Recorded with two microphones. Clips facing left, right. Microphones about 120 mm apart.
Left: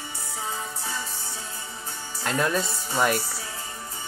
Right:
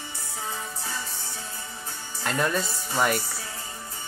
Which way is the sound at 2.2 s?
Centre (ahead or behind).